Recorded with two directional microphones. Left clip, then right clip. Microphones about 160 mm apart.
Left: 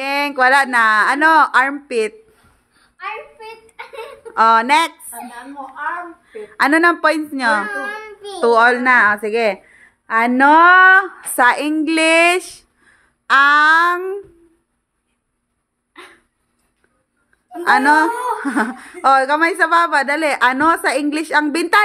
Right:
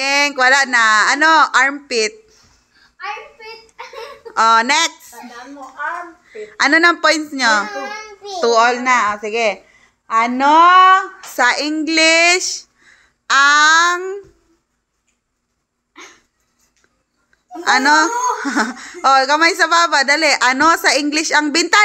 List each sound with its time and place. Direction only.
0.0 s a woman's voice: 15° left (ahead or behind)
4.3 s speech: 10° left (ahead or behind)
6.2 s speech: 15° left (ahead or behind)
8.4 s a woman's voice: 30° left (ahead or behind)
11.3 s a woman's voice: 25° left (ahead or behind)
17.6 s speech: 15° left (ahead or behind)